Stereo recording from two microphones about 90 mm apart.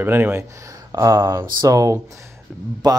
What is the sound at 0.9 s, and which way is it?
Speech, 35° right (ahead or behind).